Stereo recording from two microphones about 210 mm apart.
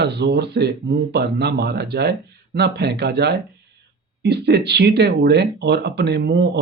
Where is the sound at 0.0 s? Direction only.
55° right (ahead or behind).